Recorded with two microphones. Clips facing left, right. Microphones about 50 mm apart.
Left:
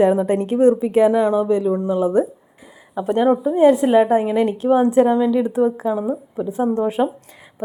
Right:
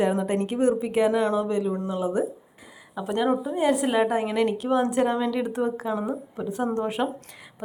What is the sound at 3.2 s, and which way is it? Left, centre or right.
Speech, centre.